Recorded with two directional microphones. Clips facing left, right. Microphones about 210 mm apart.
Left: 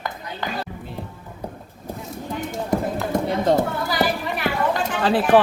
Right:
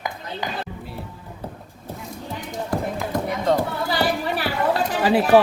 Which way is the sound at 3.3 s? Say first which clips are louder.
Left 2 dB; 30° left (ahead or behind).